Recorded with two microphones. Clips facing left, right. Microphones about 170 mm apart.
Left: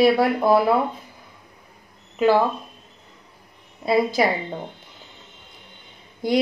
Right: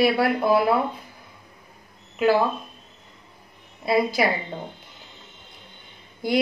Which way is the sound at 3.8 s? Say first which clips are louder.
Left 2 dB; 5° right (ahead or behind).